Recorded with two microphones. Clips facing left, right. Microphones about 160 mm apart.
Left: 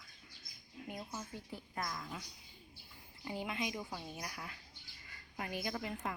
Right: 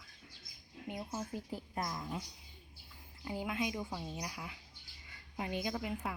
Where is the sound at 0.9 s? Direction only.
20° right (ahead or behind).